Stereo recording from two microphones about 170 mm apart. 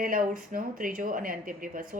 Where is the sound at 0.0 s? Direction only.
55° right (ahead or behind).